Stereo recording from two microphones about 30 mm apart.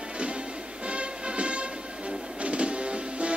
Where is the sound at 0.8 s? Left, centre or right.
Right.